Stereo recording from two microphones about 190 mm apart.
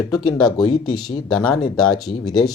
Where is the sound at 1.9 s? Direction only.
20° left (ahead or behind).